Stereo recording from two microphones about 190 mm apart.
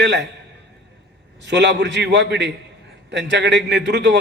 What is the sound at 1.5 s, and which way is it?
A man's voice, 65° right (ahead or behind).